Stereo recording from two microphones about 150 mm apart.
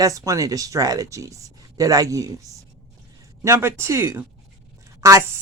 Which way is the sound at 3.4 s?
20° right (ahead or behind).